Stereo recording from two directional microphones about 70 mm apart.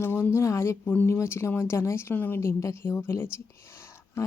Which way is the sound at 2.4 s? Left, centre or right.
Left.